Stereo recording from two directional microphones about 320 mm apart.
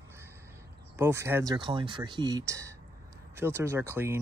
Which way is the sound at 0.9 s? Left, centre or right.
Centre.